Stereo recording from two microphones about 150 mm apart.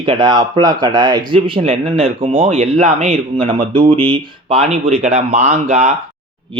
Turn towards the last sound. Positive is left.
turn(degrees=-50)  # may be behind; listen again after turning